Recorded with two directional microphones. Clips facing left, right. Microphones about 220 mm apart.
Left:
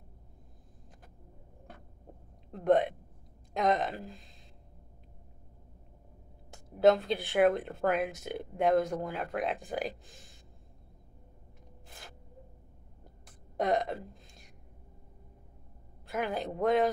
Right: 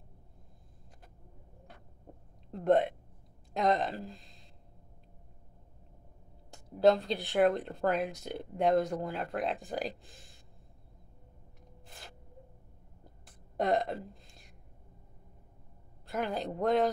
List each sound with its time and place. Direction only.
2.5 s speech: centre (ahead or behind)
6.5 s speech: centre (ahead or behind)
13.6 s speech: centre (ahead or behind)
16.1 s speech: centre (ahead or behind)